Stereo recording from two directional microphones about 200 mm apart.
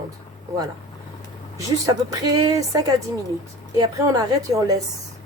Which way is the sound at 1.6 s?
20° right (ahead or behind).